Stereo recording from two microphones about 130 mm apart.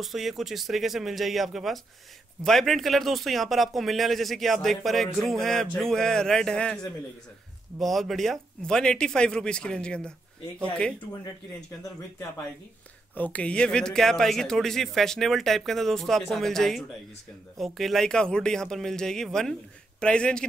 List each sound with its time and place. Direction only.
0.0 s speech: centre (ahead or behind)
7.8 s speech: centre (ahead or behind)
13.1 s speech: 10° left (ahead or behind)